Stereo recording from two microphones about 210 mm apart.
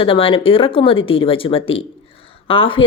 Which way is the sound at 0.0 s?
25° left (ahead or behind).